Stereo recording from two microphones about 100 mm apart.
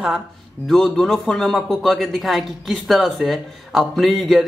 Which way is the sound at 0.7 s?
5° left (ahead or behind).